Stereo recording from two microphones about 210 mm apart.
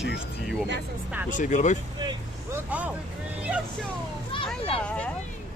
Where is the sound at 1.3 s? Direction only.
35° left (ahead or behind).